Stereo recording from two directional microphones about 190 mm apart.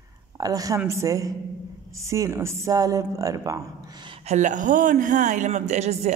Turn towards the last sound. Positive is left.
turn(degrees=-35)  # may be behind; listen again after turning